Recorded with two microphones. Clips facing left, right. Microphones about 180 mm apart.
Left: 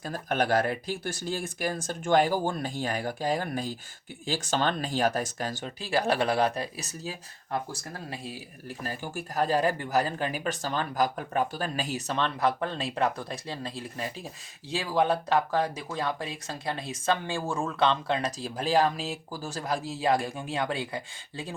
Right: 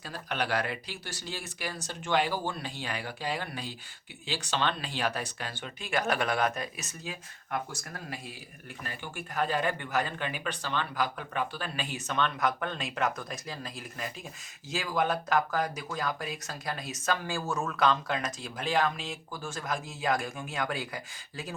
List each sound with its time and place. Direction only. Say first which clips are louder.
0.0 s speech: left 6 dB; 45° left (ahead or behind); by 8.4 s 30° left (ahead or behind)
8.8 s speech: left 5 dB; 40° left (ahead or behind)